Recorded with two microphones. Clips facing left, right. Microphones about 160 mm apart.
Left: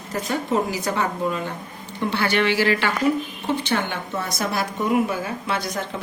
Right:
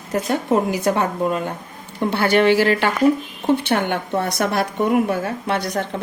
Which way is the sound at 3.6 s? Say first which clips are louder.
Right 4 dB; 60° right (ahead or behind).